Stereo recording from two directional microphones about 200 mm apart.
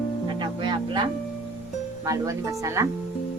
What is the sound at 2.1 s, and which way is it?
Speech, 15° right (ahead or behind).